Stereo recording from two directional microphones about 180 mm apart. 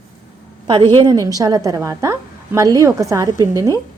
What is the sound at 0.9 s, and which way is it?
A woman's voice, 20° right (ahead or behind).